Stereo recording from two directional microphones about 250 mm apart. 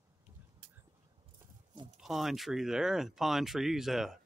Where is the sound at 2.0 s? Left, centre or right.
Centre.